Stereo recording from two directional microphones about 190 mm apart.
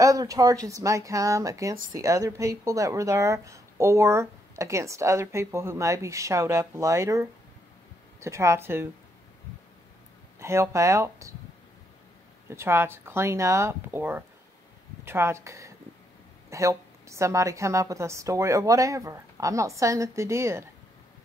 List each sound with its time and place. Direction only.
0.0 s speech: 20° right (ahead or behind)
10.4 s speech: 15° right (ahead or behind)
12.4 s speech: 15° right (ahead or behind)